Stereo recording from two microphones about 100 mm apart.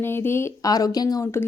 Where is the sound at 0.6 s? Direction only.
40° left (ahead or behind).